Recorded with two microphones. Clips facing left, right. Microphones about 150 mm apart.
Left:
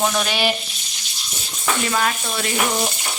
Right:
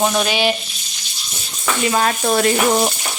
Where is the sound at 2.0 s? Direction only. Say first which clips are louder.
Right 6 dB; 50° right (ahead or behind).